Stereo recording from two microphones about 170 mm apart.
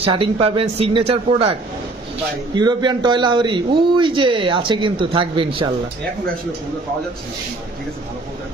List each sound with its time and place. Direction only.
0.0 s a man's voice: 30° right (ahead or behind)